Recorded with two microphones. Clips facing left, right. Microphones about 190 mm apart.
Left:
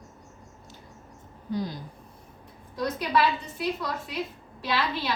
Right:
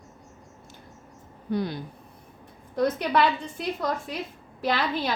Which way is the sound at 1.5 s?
65° right (ahead or behind).